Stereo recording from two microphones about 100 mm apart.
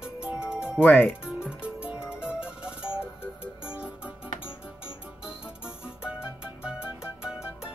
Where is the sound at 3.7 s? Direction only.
10° right (ahead or behind).